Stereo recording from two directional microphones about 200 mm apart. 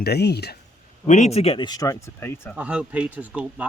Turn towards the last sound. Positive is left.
turn(degrees=-5)  # may be behind; listen again after turning